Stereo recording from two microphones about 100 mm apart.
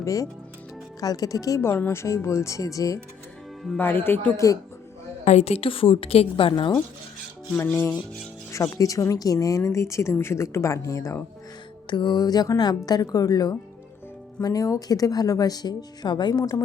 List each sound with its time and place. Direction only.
0.0 s a woman's voice: 35° left (ahead or behind)
3.8 s speech: 20° left (ahead or behind)
5.4 s a woman's voice: 80° left; by 6.7 s 55° left (ahead or behind)
7.5 s a woman's voice: 25° left (ahead or behind)
11.9 s a woman's voice: 50° left (ahead or behind)